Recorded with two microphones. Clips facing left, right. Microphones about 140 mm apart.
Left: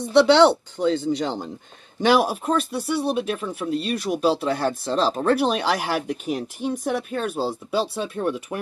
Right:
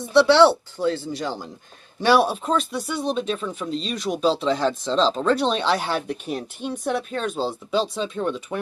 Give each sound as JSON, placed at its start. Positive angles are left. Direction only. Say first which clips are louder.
{"t": 0.1, "sound": "speech", "louder": "even", "side_deg": 20}